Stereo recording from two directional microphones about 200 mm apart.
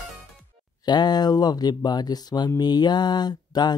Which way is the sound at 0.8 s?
20° left (ahead or behind).